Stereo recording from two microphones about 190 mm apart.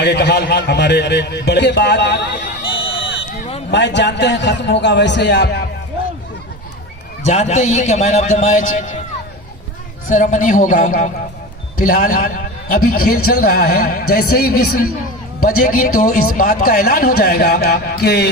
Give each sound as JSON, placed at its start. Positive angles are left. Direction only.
{"t": 0.0, "sound": "a man's voice", "side_deg": 60}
{"t": 3.7, "sound": "a man's voice", "side_deg": 65}
{"t": 7.3, "sound": "a man's voice", "side_deg": 35}
{"t": 10.1, "sound": "a man's voice", "side_deg": 40}